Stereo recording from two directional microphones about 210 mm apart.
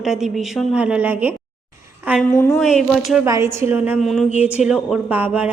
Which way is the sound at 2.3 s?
10° left (ahead or behind).